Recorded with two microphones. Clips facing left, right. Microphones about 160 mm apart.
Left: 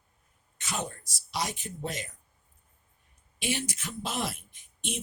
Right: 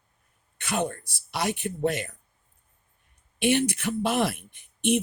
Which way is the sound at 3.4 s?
60° right (ahead or behind).